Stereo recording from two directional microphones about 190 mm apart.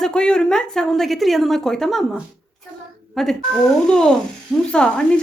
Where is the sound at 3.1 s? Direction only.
Centre (ahead or behind).